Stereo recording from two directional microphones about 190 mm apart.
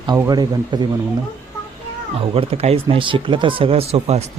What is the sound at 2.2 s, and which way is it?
Speech, 30° right (ahead or behind).